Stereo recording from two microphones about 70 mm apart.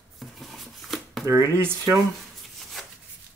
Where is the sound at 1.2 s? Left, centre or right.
Right.